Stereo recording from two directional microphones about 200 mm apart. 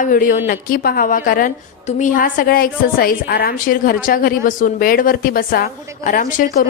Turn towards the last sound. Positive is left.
turn(degrees=40)  # may be behind; listen again after turning